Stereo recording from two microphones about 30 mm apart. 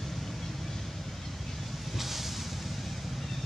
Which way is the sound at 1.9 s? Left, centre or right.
Centre.